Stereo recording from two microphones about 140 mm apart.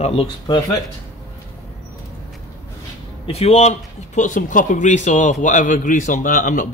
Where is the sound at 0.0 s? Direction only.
40° left (ahead or behind).